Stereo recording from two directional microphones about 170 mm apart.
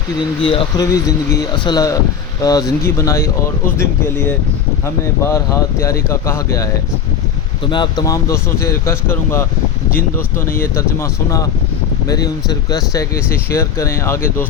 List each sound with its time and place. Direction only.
0.4 s speech: 35° left (ahead or behind)
0.8 s speech: 20° left (ahead or behind)
5.2 s speech: 20° left (ahead or behind)
7.6 s speech: 25° left (ahead or behind)